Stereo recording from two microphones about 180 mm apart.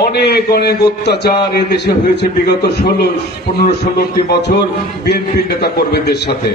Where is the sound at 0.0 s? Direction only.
65° left (ahead or behind).